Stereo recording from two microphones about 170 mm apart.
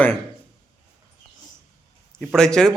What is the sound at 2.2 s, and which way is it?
Speech, 5° left (ahead or behind).